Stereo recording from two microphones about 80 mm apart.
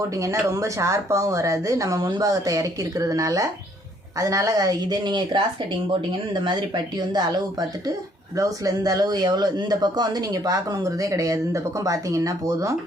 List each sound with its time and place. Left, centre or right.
0.2 s a woman's voice: right
7.1 s a woman's voice: right
8.4 s speech: right